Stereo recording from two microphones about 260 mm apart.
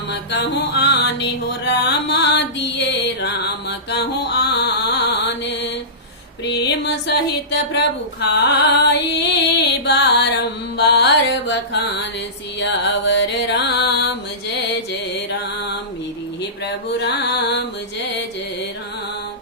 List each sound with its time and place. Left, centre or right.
0.1 s mantra: left
6.4 s music: left
15.3 s mantra: left
17.0 s carnatic music: left